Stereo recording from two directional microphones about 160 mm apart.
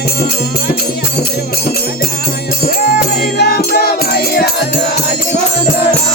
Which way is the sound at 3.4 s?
75° left (ahead or behind).